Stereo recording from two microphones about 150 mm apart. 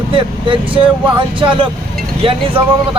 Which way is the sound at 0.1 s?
35° right (ahead or behind).